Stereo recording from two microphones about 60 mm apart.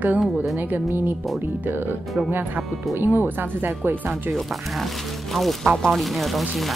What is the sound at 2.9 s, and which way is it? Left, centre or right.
Speech, right.